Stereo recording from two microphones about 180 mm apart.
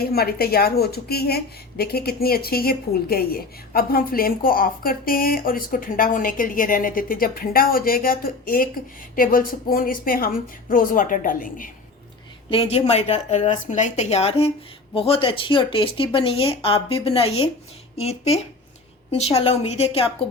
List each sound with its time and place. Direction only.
0.0 s a woman's voice: 60° left (ahead or behind)
12.5 s speech: 30° left (ahead or behind)